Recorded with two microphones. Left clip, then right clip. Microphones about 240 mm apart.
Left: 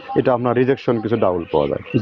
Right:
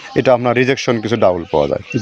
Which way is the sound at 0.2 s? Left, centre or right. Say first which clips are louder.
Right 4 dB; right.